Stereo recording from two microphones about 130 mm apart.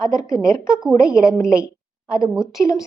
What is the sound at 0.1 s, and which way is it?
A woman's voice, 25° left (ahead or behind).